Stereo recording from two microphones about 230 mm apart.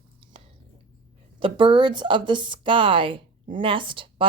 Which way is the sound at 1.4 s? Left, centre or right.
Right.